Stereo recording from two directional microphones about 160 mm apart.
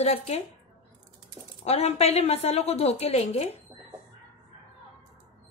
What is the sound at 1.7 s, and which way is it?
Speech, 40° left (ahead or behind).